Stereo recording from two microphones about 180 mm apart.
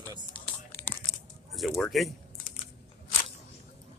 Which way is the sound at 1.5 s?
Centre (ahead or behind).